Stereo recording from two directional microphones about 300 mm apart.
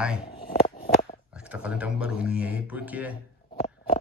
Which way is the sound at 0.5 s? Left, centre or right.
Left.